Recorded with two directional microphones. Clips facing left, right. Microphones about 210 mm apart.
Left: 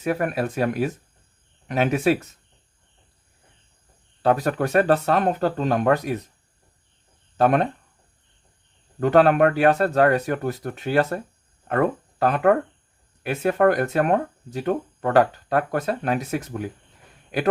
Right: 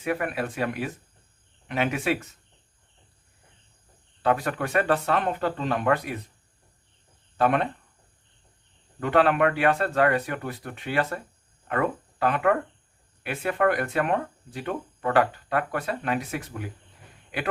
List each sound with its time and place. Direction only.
0.0 s speech: 40° left (ahead or behind)
4.2 s speech: 40° left (ahead or behind)
7.3 s speech: 40° left (ahead or behind)
9.0 s speech: 40° left (ahead or behind)